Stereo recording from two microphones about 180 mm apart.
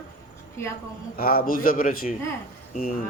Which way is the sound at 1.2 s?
55° left (ahead or behind).